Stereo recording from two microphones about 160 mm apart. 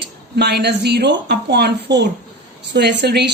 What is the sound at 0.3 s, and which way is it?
A woman's voice, 90° right.